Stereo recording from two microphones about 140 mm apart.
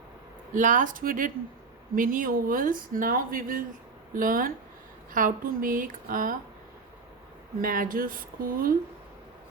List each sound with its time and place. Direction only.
0.5 s speech: 70° right (ahead or behind); by 3.6 s 90° right
4.1 s speech: 80° right
7.6 s speech: 90° right